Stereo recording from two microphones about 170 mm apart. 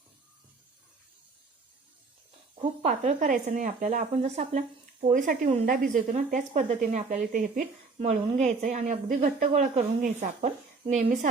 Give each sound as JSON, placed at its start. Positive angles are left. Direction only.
{"t": 2.6, "sound": "a woman's voice", "side_deg": -40}
{"t": 7.9, "sound": "a woman's voice", "side_deg": -40}